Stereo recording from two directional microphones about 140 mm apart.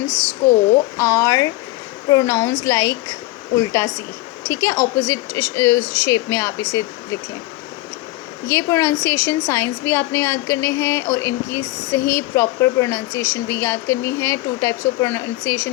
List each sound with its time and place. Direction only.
0.4 s a woman's voice: 15° left (ahead or behind)
8.4 s a woman's voice: 25° left (ahead or behind)